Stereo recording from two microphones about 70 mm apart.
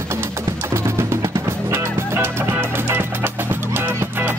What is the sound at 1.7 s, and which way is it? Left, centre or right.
Music, right.